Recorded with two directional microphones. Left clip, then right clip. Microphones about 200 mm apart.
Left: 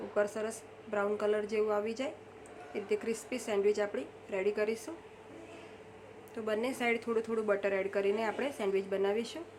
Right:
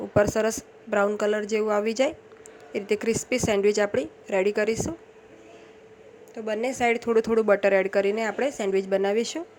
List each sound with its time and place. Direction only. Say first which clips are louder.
0.1 s a woman's voice: right 11 dB; 40° right (ahead or behind)
6.3 s a woman's voice: right 7 dB; 25° right (ahead or behind)